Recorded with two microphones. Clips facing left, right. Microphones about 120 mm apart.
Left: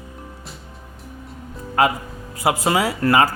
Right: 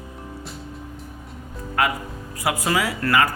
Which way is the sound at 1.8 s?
30° left (ahead or behind).